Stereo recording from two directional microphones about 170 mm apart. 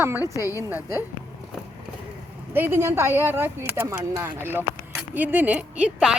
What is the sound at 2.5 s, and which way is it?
Speech, 10° right (ahead or behind).